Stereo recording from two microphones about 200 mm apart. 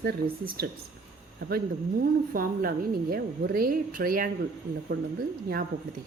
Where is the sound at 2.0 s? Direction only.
45° right (ahead or behind).